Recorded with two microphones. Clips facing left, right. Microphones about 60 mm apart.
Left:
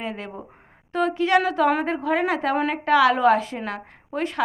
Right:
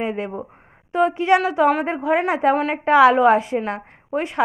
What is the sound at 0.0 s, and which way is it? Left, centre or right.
A woman's voice, right.